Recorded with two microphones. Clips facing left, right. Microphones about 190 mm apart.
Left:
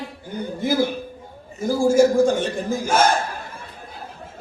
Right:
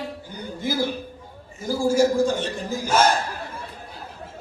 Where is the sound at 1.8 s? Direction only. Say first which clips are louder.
Left 4 dB; 50° left (ahead or behind).